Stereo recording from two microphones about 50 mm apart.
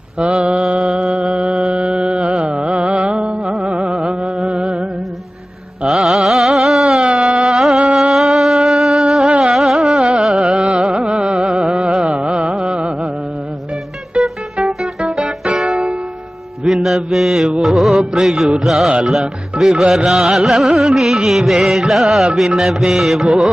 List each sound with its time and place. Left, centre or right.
0.4 s mantra: right
3.6 s music: right
5.9 s carnatic music: centre
6.9 s music: centre
9.4 s carnatic music: centre
10.4 s carnatic music: right
12.6 s music: right
14.2 s music: centre
16.6 s mantra: centre
17.6 s music: centre
19.2 s speech: centre
20.1 s music: centre